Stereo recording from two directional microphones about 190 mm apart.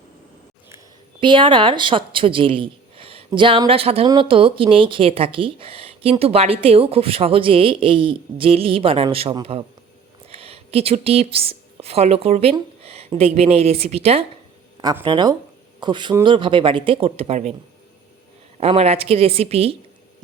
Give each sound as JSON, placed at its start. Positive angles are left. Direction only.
{"t": 1.2, "sound": "a woman's voice", "side_deg": -25}
{"t": 14.8, "sound": "speech", "side_deg": -20}
{"t": 18.5, "sound": "a woman's voice", "side_deg": -30}